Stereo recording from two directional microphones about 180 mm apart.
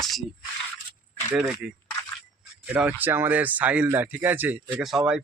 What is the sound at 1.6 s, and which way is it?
Speech, 5° right (ahead or behind).